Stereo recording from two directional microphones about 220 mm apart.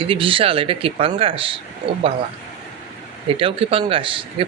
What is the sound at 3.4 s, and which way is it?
Speech, 25° right (ahead or behind).